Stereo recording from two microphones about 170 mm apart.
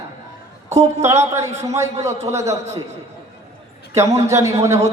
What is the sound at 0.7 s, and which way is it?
Speech, 40° right (ahead or behind).